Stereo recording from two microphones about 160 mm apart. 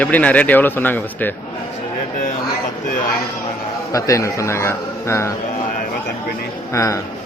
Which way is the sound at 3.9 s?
20° left (ahead or behind).